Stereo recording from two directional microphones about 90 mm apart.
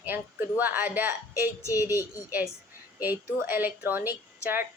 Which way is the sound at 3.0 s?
20° right (ahead or behind).